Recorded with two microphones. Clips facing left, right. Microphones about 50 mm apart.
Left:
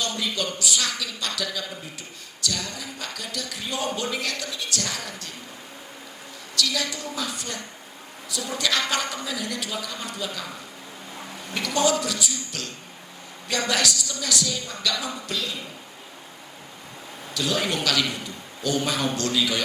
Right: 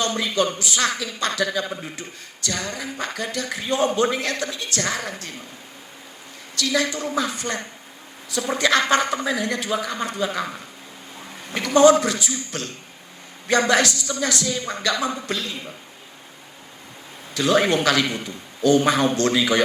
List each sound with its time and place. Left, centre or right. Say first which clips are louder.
0.0 s speech: right 6 dB; right
6.6 s speech: right 5 dB; right
17.3 s speech: right 7 dB; right